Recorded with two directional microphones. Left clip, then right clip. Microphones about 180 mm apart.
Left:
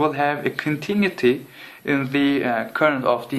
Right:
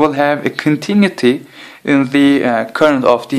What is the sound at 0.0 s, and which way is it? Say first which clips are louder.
Speech: right 7 dB; 45° right (ahead or behind).